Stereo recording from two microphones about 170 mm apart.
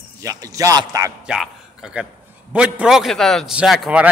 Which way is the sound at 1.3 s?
5° right (ahead or behind).